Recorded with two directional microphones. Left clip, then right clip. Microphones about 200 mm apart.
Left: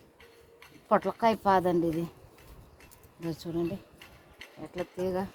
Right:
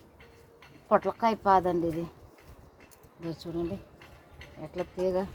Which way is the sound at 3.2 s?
50° left (ahead or behind).